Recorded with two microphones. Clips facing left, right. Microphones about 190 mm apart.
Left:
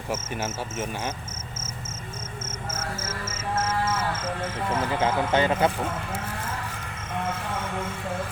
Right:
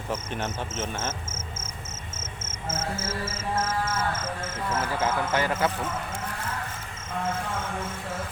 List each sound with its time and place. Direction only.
0.1 s speech: 5° left (ahead or behind)
2.7 s music: 30° right (ahead or behind)
3.6 s a sound: 50° right (ahead or behind)
4.7 s speech: 15° left (ahead or behind)